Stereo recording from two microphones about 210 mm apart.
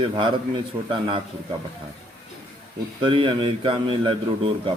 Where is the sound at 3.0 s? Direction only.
25° right (ahead or behind).